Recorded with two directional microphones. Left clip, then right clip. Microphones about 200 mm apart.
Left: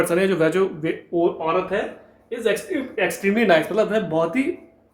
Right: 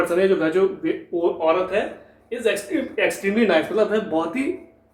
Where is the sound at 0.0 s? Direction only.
50° left (ahead or behind).